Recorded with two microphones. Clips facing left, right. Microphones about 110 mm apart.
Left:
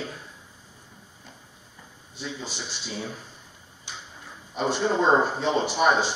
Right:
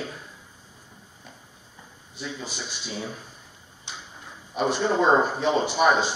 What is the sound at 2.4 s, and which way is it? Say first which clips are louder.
Speech: even; 15° right (ahead or behind).